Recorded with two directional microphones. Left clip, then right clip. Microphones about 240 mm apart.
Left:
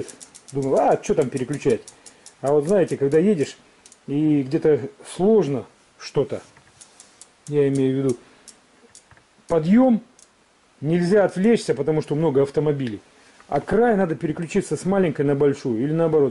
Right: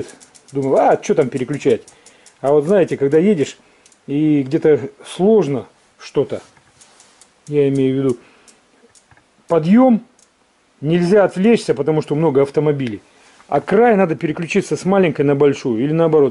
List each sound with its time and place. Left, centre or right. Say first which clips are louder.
0.0 s speech: right 4 dB; centre
0.6 s speech: right 5 dB; centre
5.9 s a sound: right 4 dB; centre
7.4 s speech: right 4 dB; centre
9.5 s speech: right 5 dB; centre